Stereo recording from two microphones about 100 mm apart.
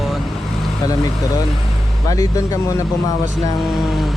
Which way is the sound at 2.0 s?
35° left (ahead or behind).